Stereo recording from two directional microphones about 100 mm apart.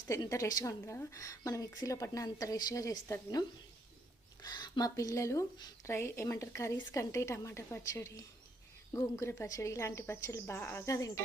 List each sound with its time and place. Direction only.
0.3 s a woman's voice: 35° left (ahead or behind)
4.4 s a sound: 45° left (ahead or behind)
4.9 s a woman's voice: 35° left (ahead or behind)